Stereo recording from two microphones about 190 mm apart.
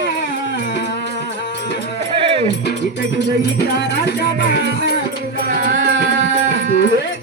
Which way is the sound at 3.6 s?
60° left (ahead or behind).